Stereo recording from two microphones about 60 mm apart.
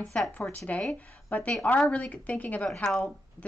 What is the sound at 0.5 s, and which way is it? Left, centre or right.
Speech, left.